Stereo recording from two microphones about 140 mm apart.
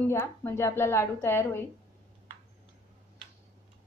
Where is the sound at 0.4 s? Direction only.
15° left (ahead or behind).